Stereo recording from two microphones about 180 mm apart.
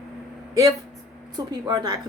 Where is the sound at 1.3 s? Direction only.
20° right (ahead or behind).